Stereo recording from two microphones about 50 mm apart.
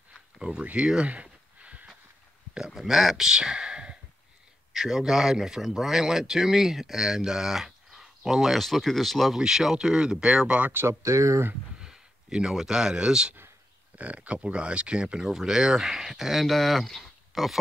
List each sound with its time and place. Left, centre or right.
0.4 s a sound: centre
2.5 s speech: centre
3.3 s a man's voice: centre
9.4 s a man's voice: centre
10.9 s speech: right
11.8 s speech: centre
13.9 s a man's voice: right; by 16.4 s centre
16.4 s speech: centre